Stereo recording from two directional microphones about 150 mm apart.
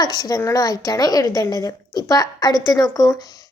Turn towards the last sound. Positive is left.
turn(degrees=25)  # may be behind; listen again after turning